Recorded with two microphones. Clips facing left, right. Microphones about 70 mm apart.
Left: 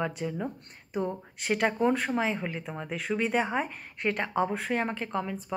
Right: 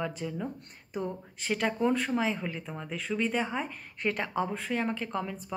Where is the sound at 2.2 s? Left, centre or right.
Left.